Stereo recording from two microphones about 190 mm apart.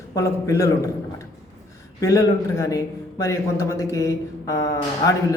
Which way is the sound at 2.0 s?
15° left (ahead or behind).